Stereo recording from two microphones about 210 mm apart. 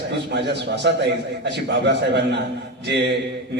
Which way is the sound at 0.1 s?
55° right (ahead or behind).